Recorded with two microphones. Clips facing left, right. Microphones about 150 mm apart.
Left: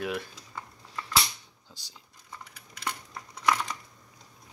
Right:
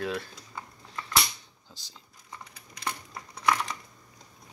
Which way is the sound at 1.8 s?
15° left (ahead or behind).